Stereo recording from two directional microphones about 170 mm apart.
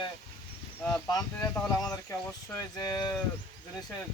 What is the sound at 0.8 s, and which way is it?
Speech, 15° left (ahead or behind).